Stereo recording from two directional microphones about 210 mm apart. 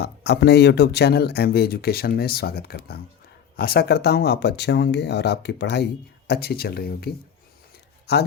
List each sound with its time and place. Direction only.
0.0 s speech: 55° left (ahead or behind)